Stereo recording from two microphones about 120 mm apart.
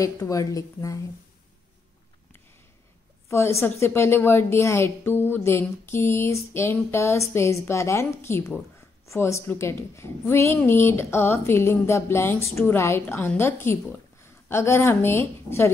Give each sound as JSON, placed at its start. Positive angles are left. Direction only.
{"t": 0.0, "sound": "speech", "side_deg": 30}
{"t": 3.3, "sound": "a woman's voice", "side_deg": 20}